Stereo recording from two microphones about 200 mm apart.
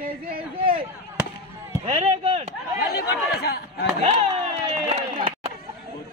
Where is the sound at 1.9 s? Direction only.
35° right (ahead or behind).